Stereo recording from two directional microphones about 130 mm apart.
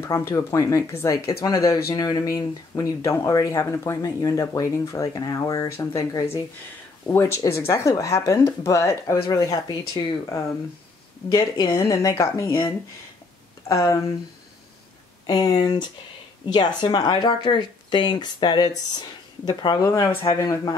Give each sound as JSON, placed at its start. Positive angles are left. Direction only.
{"t": 0.0, "sound": "speech", "side_deg": 20}
{"t": 11.3, "sound": "speech", "side_deg": 35}
{"t": 11.9, "sound": "speech", "side_deg": 25}
{"t": 13.7, "sound": "speech", "side_deg": 25}
{"t": 15.2, "sound": "speech", "side_deg": 30}